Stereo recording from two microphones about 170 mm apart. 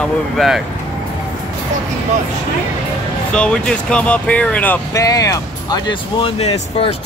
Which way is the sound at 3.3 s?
5° left (ahead or behind).